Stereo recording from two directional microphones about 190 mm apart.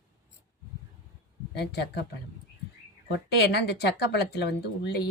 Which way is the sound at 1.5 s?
60° left (ahead or behind).